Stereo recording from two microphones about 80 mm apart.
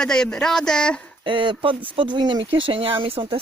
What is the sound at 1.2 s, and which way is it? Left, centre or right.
Speech, right.